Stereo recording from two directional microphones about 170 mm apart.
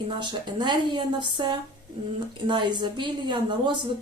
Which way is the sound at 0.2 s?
25° right (ahead or behind).